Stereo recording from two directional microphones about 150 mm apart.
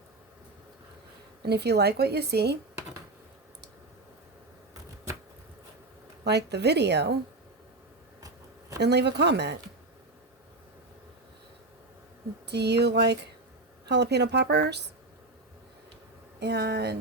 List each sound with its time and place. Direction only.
1.4 s speech: 90° right
6.2 s speech: 90° right
8.8 s speech: 90° right
12.5 s speech: 90° right
16.5 s speech: 90° right